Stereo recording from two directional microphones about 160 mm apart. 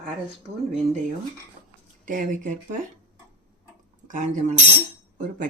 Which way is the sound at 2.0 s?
55° right (ahead or behind).